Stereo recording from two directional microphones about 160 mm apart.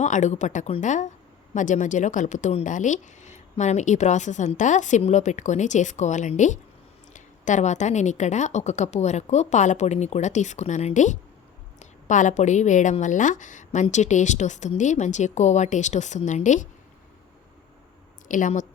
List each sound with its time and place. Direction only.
0.0 s a woman's voice: 50° left (ahead or behind)
18.3 s speech: 55° left (ahead or behind)